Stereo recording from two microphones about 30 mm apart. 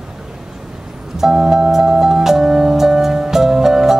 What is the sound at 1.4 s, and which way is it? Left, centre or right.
Music, right.